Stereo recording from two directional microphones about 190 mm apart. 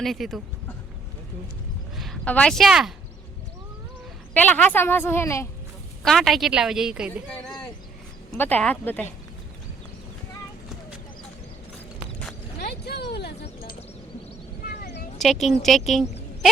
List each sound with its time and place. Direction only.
0.0 s a woman's voice: centre (ahead or behind)
2.0 s speech: 5° left (ahead or behind)
4.4 s a woman's voice: 10° left (ahead or behind)
6.0 s a woman's voice: centre (ahead or behind)
8.3 s a woman's voice: 10° left (ahead or behind)
12.6 s a sound: 60° left (ahead or behind)
15.2 s a woman's voice: centre (ahead or behind)